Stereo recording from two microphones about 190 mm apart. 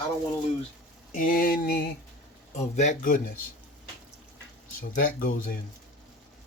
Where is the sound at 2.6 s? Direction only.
40° left (ahead or behind).